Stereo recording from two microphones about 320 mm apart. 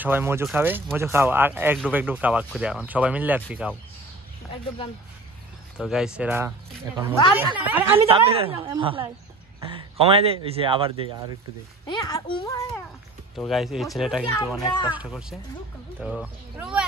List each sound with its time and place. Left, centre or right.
0.0 s speech: centre
5.8 s speech: centre
8.0 s a woman's voice: centre
11.9 s a child's voice: centre
13.4 s speech: centre
14.6 s a child's voice: centre
14.9 s speech: centre